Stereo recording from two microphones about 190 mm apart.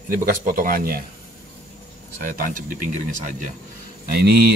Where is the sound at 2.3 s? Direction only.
45° right (ahead or behind).